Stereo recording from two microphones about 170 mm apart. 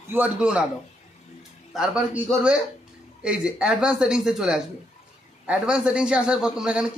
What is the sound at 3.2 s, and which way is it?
A man's voice, 5° right (ahead or behind).